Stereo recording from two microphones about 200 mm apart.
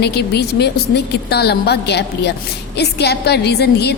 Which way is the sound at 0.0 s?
55° left (ahead or behind).